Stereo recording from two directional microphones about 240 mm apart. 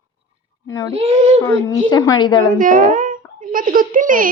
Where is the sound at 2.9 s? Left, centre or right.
Right.